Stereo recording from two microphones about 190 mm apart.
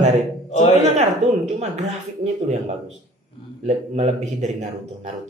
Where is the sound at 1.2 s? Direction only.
35° right (ahead or behind).